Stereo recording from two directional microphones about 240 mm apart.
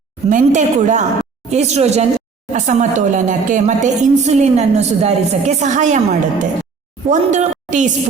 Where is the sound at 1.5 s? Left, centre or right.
Right.